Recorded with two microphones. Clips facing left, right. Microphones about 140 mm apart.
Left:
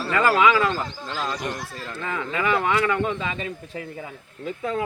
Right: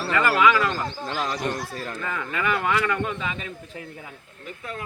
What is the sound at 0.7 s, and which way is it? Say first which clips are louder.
Speech: even; 15° right (ahead or behind).